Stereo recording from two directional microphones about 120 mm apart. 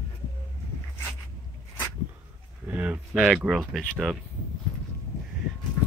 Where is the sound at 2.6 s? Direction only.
10° right (ahead or behind).